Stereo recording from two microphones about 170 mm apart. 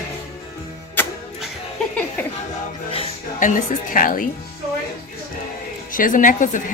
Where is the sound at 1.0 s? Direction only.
10° left (ahead or behind).